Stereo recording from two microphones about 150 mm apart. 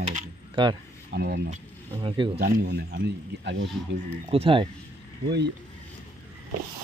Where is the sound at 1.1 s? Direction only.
80° right.